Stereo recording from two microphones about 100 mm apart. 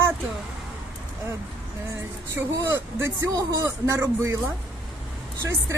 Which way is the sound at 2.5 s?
25° right (ahead or behind).